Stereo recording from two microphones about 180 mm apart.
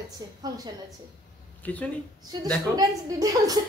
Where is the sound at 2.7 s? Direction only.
20° right (ahead or behind).